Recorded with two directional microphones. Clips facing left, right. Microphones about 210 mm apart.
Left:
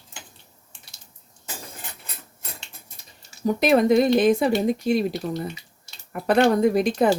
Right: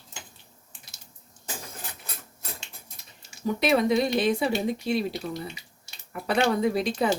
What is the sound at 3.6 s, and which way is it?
Speech, 50° left (ahead or behind).